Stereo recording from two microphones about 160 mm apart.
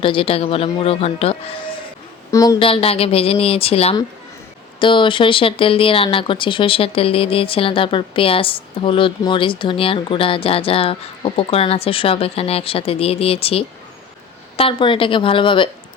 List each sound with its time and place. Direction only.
0.0 s speech: 35° left (ahead or behind)
2.3 s a woman's voice: 20° left (ahead or behind)
2.6 s speech: 35° left (ahead or behind)